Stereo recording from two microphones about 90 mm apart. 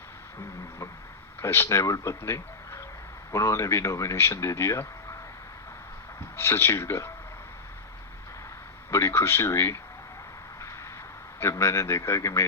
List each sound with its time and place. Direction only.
1.4 s a man's voice: 30° left (ahead or behind)
6.3 s speech: 30° left (ahead or behind)
8.9 s speech: 30° left (ahead or behind)
11.3 s speech: 30° left (ahead or behind)